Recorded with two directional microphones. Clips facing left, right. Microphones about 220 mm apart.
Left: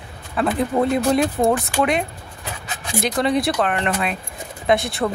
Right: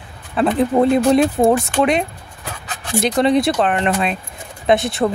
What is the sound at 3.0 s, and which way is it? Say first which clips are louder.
Speech: right 4 dB; 25° right (ahead or behind).